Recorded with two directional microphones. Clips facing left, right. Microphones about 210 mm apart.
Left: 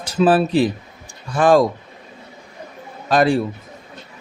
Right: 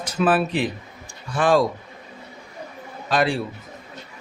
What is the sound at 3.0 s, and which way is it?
Speech, 45° left (ahead or behind).